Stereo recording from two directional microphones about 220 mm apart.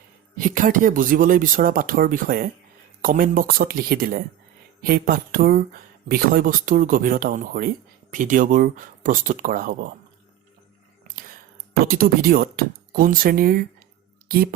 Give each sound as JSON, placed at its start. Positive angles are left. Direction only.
{"t": 0.3, "sound": "speech", "side_deg": -40}
{"t": 11.7, "sound": "a woman's voice", "side_deg": -40}